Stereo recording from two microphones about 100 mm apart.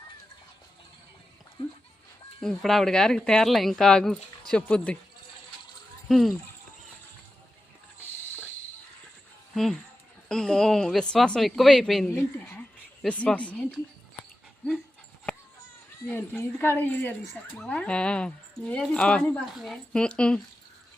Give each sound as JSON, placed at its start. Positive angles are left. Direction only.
{"t": 2.4, "sound": "speech", "side_deg": 5}
{"t": 6.1, "sound": "speech", "side_deg": 0}
{"t": 10.2, "sound": "speech", "side_deg": 5}
{"t": 12.1, "sound": "speech", "side_deg": 20}
{"t": 15.3, "sound": "a sound", "side_deg": 5}
{"t": 16.0, "sound": "speech", "side_deg": 10}
{"t": 19.5, "sound": "speech", "side_deg": 0}